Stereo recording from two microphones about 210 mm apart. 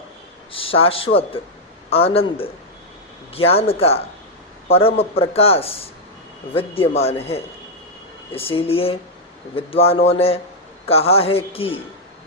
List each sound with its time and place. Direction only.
0.5 s a man's voice: 25° left (ahead or behind)